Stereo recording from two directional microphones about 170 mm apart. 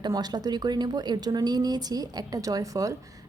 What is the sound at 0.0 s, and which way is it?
A woman's voice, 25° right (ahead or behind).